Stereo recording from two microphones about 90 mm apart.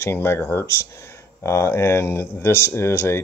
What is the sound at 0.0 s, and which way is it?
Speech, 25° left (ahead or behind).